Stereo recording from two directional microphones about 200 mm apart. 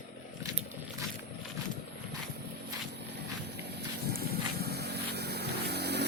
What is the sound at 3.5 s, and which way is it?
Vehicle, 55° right (ahead or behind).